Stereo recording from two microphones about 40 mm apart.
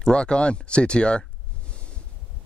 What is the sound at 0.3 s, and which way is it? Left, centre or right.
Speech, left.